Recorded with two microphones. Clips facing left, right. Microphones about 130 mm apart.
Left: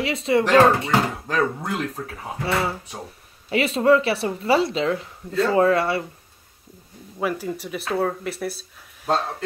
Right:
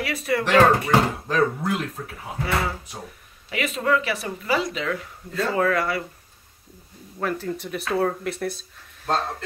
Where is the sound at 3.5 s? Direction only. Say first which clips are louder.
Left 6 dB; 30° left (ahead or behind).